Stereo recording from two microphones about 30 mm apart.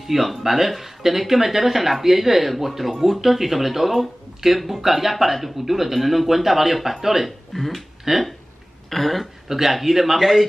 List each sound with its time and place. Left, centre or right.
0.0 s speech: centre
8.1 s speech: centre
8.9 s speech: centre
9.5 s speech: centre